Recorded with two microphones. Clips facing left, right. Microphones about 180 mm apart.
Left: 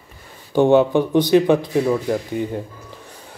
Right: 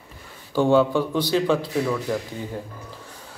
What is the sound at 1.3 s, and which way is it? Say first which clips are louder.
Speech: left 6 dB; 55° left (ahead or behind).